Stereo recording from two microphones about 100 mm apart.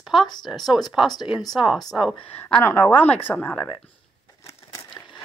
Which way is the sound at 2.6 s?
20° left (ahead or behind).